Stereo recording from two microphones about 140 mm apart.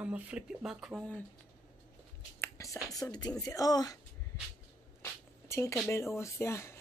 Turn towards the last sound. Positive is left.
turn(degrees=20)  # may be behind; listen again after turning